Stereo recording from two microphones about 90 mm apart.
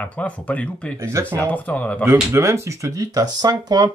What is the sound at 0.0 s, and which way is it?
Speech, 15° left (ahead or behind).